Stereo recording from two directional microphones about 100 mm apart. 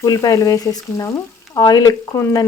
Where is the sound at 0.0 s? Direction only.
35° left (ahead or behind).